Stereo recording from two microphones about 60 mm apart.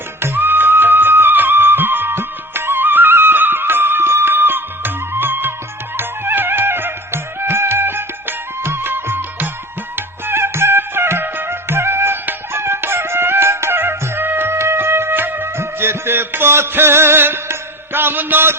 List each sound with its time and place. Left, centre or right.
0.2 s music: right